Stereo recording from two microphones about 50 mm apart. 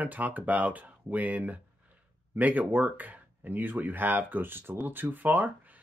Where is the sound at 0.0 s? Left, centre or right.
Right.